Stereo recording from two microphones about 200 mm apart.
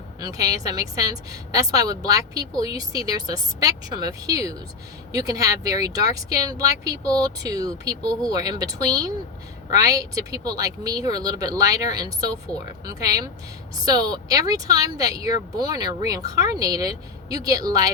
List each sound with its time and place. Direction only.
0.2 s a woman's voice: 15° right (ahead or behind)